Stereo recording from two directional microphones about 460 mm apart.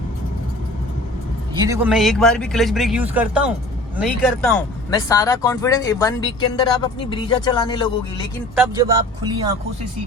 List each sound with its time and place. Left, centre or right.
1.5 s a man's voice: centre
8.5 s speech: centre